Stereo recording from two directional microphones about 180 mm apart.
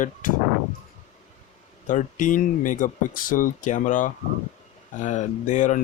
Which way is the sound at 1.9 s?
45° left (ahead or behind).